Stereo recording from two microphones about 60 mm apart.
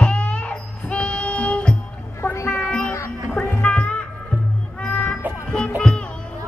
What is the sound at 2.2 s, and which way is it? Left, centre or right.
Music, left.